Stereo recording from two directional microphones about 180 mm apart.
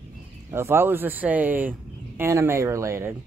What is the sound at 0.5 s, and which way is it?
Speech, 15° right (ahead or behind).